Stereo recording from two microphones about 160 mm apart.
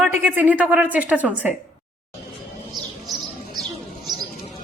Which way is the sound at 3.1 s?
25° right (ahead or behind).